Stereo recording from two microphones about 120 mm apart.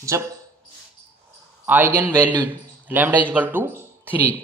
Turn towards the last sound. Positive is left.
turn(degrees=-15)  # may be behind; listen again after turning